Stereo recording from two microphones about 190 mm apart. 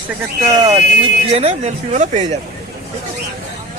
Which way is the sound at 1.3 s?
30° right (ahead or behind).